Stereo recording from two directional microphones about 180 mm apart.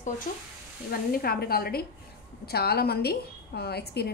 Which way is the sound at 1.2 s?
55° left (ahead or behind).